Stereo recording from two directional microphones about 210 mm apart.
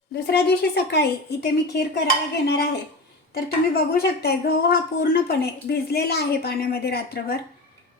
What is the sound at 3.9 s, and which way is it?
A woman's voice, 50° left (ahead or behind).